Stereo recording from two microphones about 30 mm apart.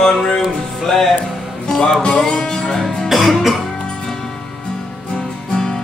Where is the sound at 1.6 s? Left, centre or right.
Left.